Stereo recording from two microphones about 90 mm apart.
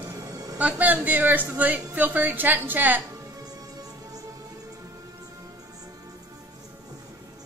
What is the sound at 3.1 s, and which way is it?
Music, 40° right (ahead or behind).